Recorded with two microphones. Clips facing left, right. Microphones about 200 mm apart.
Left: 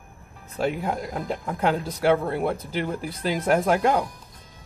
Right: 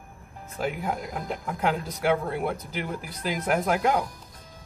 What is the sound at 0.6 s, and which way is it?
Speech, 30° left (ahead or behind).